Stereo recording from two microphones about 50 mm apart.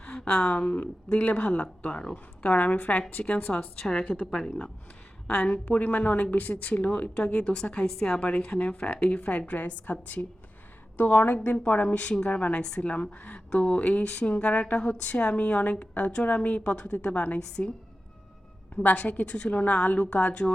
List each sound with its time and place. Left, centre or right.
0.0 s a sound: centre
0.5 s a woman's voice: left
4.3 s speech: centre
5.3 s a woman's voice: left
18.8 s a woman's voice: left